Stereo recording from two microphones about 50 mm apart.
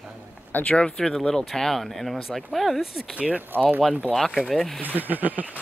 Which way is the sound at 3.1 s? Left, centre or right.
Right.